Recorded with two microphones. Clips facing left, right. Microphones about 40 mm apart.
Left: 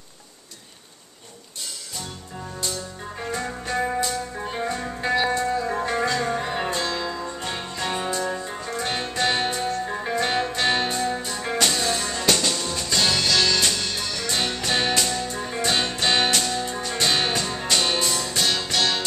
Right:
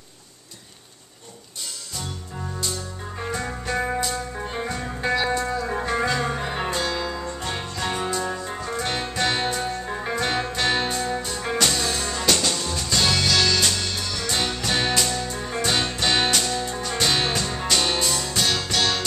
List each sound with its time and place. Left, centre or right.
2.6 s music: centre